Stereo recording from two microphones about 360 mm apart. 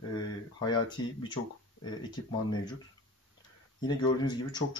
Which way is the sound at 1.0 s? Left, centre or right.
Centre.